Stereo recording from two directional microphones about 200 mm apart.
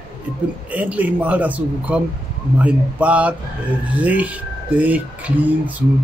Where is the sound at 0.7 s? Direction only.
10° right (ahead or behind).